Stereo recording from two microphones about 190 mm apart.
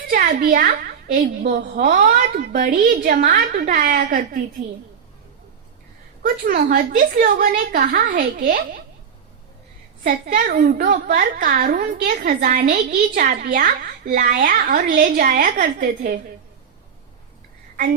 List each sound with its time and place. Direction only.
0.1 s a woman's voice: 50° right (ahead or behind)
6.2 s a woman's voice: 55° right (ahead or behind)
10.0 s a woman's voice: 45° right (ahead or behind)